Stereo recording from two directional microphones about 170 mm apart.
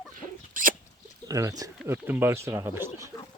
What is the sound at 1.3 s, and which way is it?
Speech, 20° right (ahead or behind).